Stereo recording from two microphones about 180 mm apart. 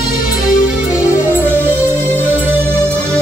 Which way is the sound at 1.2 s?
10° right (ahead or behind).